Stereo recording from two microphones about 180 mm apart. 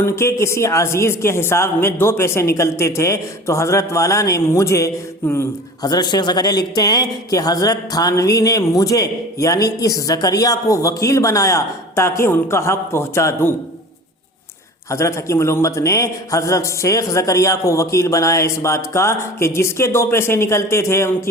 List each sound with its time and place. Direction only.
0.0 s speech: 15° left (ahead or behind)
14.8 s speech: 15° left (ahead or behind)